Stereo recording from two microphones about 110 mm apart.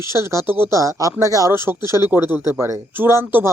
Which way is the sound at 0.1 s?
25° right (ahead or behind).